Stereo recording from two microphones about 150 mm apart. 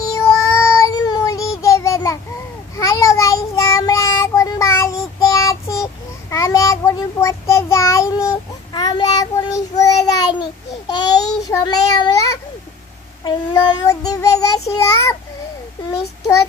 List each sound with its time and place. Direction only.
0.0 s child singing: 20° left (ahead or behind)